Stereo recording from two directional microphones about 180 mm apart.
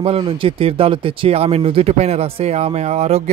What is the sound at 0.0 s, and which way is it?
Speech, 30° right (ahead or behind).